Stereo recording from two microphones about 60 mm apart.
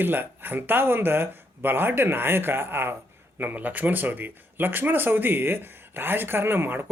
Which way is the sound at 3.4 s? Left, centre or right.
Right.